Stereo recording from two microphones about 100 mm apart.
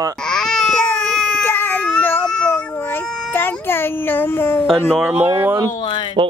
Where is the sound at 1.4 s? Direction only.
20° left (ahead or behind).